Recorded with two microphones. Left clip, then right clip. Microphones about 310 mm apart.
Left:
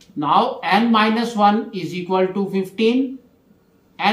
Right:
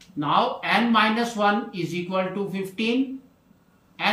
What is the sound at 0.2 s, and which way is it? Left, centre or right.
Speech, centre.